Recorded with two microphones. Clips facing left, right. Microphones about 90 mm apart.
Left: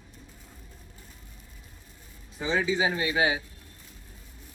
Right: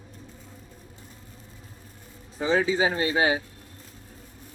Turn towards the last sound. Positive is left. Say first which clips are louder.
# right 3 dB
turn(degrees=-40)  # may be behind; listen again after turning